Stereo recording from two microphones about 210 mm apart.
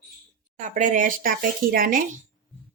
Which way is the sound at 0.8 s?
40° right (ahead or behind).